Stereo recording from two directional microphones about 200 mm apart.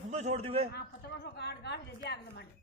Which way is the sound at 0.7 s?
55° left (ahead or behind).